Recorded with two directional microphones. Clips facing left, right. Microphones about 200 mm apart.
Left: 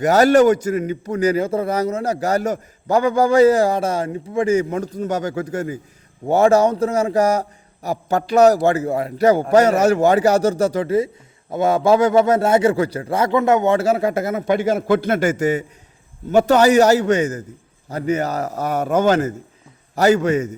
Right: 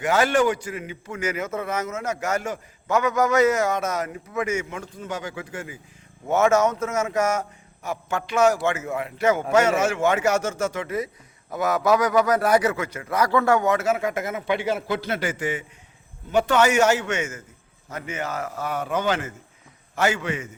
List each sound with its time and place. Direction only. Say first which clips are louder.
0.0 s a man's voice: left 8 dB; 40° left (ahead or behind)